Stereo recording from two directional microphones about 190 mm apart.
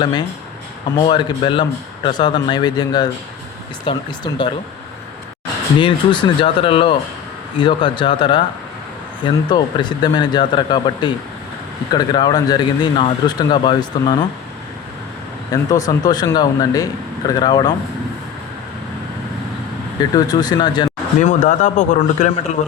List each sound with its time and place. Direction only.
0.0 s speech: 25° left (ahead or behind)
5.8 s speech: 25° left (ahead or behind)
15.7 s speech: 20° left (ahead or behind)
20.0 s speech: 20° left (ahead or behind)
21.2 s speech: 40° left (ahead or behind)